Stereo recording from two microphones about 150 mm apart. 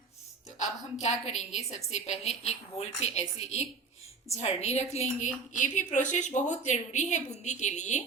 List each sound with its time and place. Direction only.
0.6 s a woman's voice: 50° left (ahead or behind)